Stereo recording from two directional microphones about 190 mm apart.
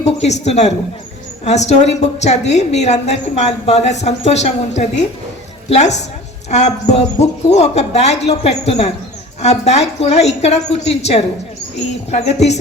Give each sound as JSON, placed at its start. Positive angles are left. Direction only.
{"t": 0.0, "sound": "a woman's voice", "side_deg": 35}